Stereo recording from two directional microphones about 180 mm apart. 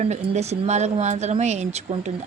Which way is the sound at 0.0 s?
35° right (ahead or behind).